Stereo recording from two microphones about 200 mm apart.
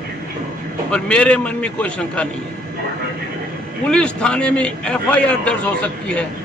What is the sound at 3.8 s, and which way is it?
A man's voice, 5° left (ahead or behind).